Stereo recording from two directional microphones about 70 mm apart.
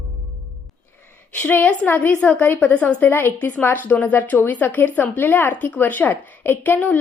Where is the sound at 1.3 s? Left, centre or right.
Left.